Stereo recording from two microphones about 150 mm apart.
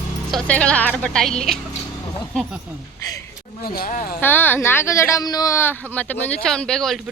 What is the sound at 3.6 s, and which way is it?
Speech, 75° left (ahead or behind).